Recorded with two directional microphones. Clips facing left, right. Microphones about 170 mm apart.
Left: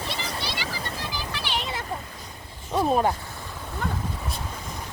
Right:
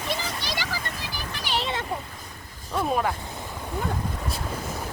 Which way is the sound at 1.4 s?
35° right (ahead or behind).